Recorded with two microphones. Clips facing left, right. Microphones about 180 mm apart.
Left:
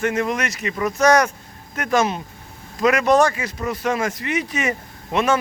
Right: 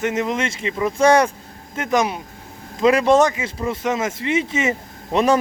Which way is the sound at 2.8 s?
30° right (ahead or behind).